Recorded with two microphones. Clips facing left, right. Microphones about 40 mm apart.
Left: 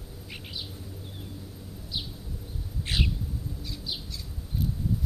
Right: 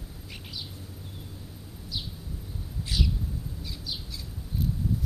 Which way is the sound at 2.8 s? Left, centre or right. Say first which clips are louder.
Left 2 dB; left.